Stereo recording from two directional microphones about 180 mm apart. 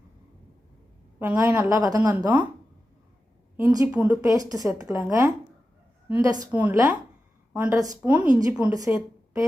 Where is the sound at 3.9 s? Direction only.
5° right (ahead or behind).